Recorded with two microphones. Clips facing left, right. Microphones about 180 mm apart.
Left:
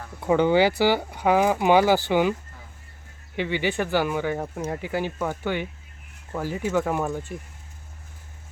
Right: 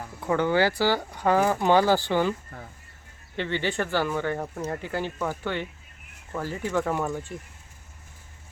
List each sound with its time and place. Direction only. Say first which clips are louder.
0.3 s speech: left 4 dB; 20° left (ahead or behind)
3.3 s speech: left 2 dB; 10° left (ahead or behind)